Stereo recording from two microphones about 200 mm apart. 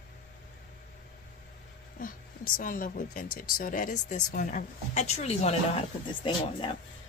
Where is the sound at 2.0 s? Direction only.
45° left (ahead or behind).